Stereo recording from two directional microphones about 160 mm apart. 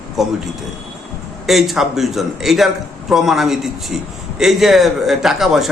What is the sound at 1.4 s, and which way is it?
A man's voice, centre (ahead or behind).